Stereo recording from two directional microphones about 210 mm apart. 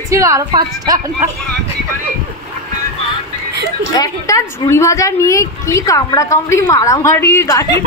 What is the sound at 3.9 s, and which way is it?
A woman's voice, 15° left (ahead or behind).